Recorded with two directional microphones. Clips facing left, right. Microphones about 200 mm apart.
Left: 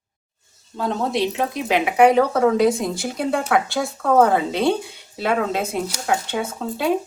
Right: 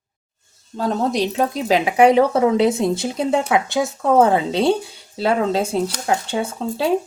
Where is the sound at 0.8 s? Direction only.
40° right (ahead or behind).